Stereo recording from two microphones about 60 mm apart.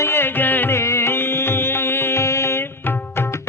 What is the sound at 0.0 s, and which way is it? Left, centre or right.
Music, left.